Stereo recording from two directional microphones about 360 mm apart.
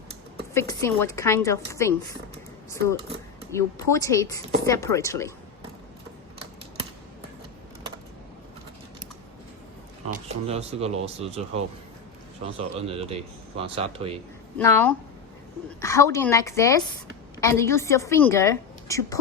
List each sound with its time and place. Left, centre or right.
0.5 s speech: centre
3.5 s speech: centre
10.1 s speech: centre
14.6 s a woman's voice: centre